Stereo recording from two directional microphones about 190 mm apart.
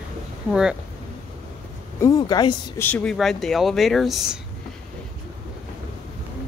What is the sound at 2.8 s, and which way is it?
Speech, 5° left (ahead or behind).